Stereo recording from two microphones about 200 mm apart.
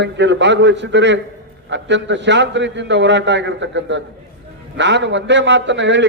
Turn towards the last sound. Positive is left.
turn(degrees=-65)  # may be behind; listen again after turning